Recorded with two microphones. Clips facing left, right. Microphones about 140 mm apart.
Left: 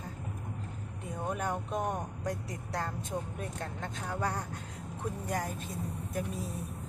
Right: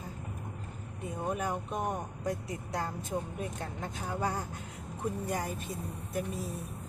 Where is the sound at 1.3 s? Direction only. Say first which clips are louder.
Even; 5° right (ahead or behind).